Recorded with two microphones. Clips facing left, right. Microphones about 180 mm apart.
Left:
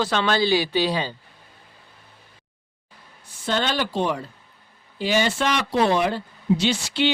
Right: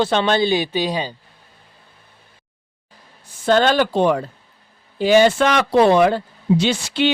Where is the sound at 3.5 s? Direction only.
45° right (ahead or behind).